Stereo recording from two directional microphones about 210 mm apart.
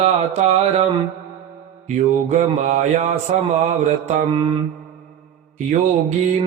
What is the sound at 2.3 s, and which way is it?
Mantra, 35° right (ahead or behind).